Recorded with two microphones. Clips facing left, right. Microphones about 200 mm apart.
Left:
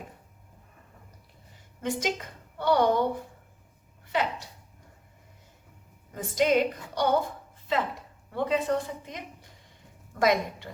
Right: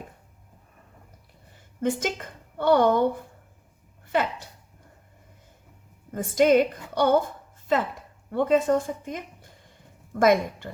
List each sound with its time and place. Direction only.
1.8 s a woman's voice: 50° right (ahead or behind)
6.1 s a woman's voice: 50° right (ahead or behind)
8.3 s a woman's voice: 45° right (ahead or behind)